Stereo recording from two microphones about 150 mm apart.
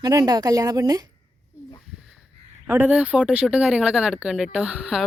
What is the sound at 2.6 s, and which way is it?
Speech, 10° right (ahead or behind).